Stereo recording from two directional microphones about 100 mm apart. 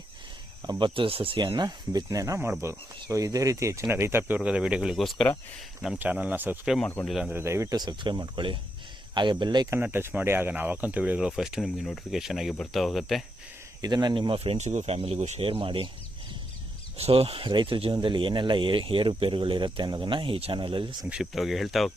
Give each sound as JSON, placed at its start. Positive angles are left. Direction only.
{"t": 0.7, "sound": "speech", "side_deg": -55}
{"t": 1.4, "sound": "speech", "side_deg": -45}
{"t": 3.8, "sound": "speech", "side_deg": -20}
{"t": 4.4, "sound": "speech", "side_deg": -10}
{"t": 6.0, "sound": "speech", "side_deg": -15}
{"t": 6.8, "sound": "speech", "side_deg": 20}
{"t": 7.1, "sound": "speech", "side_deg": -5}
{"t": 7.3, "sound": "speech", "side_deg": -30}
{"t": 7.8, "sound": "speech", "side_deg": -45}
{"t": 9.6, "sound": "speech", "side_deg": -25}
{"t": 13.8, "sound": "speech", "side_deg": -45}
{"t": 17.0, "sound": "speech", "side_deg": -75}
{"t": 21.1, "sound": "speech", "side_deg": -5}